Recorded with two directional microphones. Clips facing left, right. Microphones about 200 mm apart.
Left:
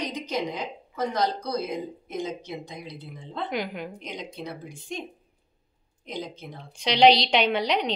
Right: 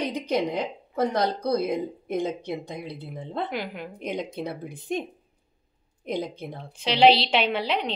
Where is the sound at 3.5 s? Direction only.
5° right (ahead or behind).